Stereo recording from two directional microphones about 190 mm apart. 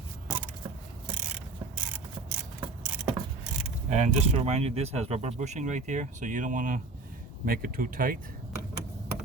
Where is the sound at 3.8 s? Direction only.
40° right (ahead or behind).